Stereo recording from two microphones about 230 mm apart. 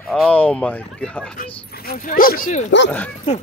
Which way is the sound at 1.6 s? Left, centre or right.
Left.